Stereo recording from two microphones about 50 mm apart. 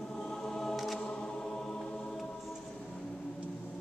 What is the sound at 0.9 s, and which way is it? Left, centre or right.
Chant, centre.